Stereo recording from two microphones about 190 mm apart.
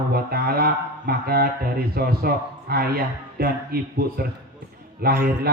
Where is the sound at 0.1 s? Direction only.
55° right (ahead or behind).